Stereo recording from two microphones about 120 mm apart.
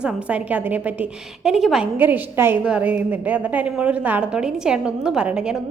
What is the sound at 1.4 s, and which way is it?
Speech, 5° right (ahead or behind).